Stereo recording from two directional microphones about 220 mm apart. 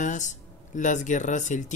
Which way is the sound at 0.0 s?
35° left (ahead or behind).